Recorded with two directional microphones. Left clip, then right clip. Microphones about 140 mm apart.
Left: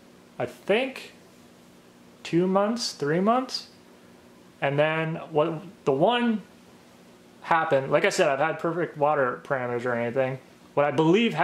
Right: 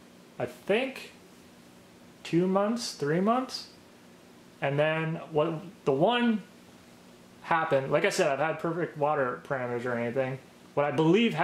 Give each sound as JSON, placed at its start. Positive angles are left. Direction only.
{"t": 0.4, "sound": "speech", "side_deg": 5}
{"t": 2.2, "sound": "speech", "side_deg": 5}
{"t": 7.4, "sound": "speech", "side_deg": 5}